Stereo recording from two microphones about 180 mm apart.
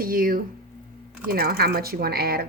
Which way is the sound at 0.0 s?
50° right (ahead or behind).